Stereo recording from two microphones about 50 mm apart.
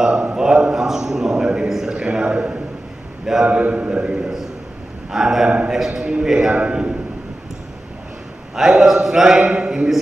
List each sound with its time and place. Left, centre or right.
0.0 s a man's voice: centre
5.1 s a man's voice: centre
6.5 s a man's voice: right
8.5 s a man's voice: centre